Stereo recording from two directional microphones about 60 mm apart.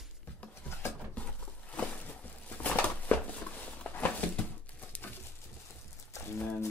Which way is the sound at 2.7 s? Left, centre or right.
Left.